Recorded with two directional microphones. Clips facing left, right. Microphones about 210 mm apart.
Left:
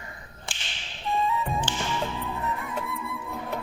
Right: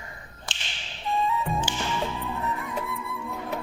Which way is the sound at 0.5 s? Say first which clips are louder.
Right 3 dB; 20° right (ahead or behind).